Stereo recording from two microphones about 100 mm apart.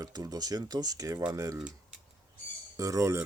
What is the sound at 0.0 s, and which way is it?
Speech, 40° right (ahead or behind).